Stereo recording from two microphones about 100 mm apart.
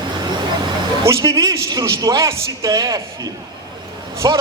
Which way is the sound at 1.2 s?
40° right (ahead or behind).